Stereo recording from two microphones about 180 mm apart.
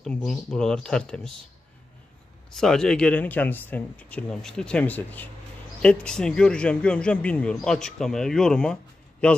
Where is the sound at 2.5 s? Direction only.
5° left (ahead or behind).